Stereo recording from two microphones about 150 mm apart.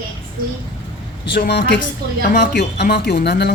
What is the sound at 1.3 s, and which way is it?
Speech, 90° left.